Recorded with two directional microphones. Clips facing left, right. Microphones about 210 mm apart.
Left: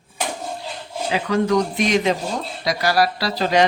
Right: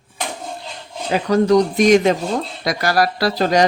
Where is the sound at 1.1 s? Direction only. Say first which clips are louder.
Right 5 dB; 40° right (ahead or behind).